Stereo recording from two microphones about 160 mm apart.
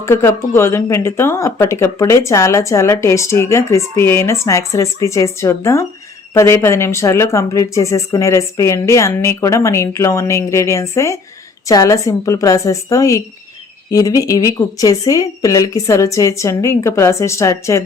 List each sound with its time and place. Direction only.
0.0 s a woman's voice: 15° left (ahead or behind)